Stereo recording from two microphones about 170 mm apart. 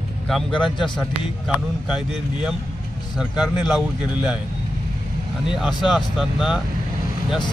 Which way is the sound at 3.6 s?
5° right (ahead or behind).